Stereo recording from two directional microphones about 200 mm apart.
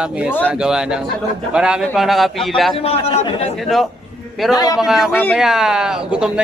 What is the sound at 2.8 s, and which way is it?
Speech, 30° left (ahead or behind).